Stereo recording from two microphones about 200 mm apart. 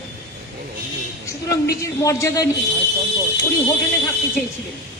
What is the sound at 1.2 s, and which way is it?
A woman's voice, 15° left (ahead or behind).